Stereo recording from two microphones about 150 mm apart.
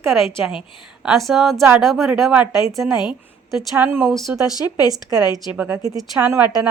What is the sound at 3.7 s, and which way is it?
Speech, 15° right (ahead or behind).